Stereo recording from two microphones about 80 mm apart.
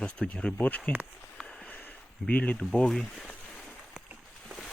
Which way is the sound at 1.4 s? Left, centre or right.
Centre.